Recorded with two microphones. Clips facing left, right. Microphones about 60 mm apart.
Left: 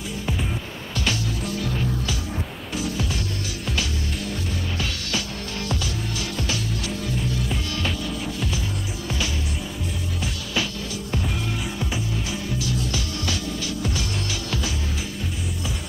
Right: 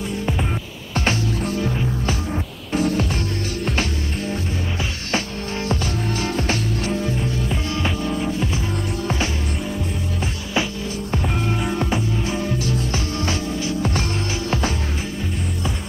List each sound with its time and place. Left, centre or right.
0.9 s music: right
4.3 s music: right
7.4 s music: right
9.0 s music: right
10.5 s music: right